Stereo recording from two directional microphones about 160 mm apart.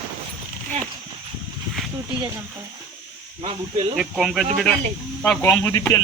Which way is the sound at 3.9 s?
Centre (ahead or behind).